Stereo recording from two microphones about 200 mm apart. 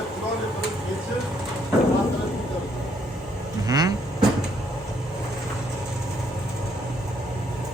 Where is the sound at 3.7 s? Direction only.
20° right (ahead or behind).